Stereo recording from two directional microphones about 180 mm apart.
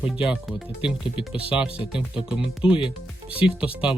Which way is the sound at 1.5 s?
5° right (ahead or behind).